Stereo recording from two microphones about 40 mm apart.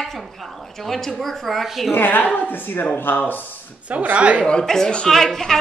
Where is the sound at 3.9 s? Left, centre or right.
Right.